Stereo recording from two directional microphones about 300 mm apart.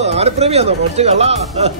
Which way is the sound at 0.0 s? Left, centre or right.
Right.